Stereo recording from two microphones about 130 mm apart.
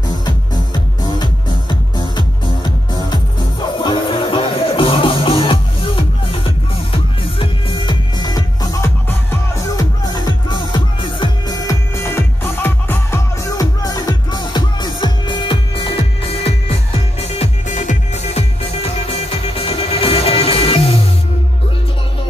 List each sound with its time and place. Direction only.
1.2 s music: 35° left (ahead or behind)